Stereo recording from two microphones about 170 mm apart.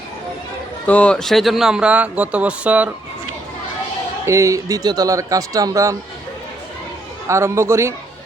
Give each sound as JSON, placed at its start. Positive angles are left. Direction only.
{"t": 0.9, "sound": "speech", "side_deg": 10}
{"t": 4.3, "sound": "speech", "side_deg": -15}
{"t": 7.3, "sound": "a man's voice", "side_deg": -15}